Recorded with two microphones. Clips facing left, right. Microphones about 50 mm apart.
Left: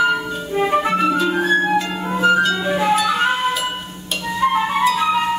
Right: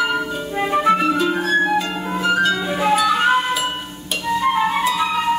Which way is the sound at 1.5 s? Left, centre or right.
Centre.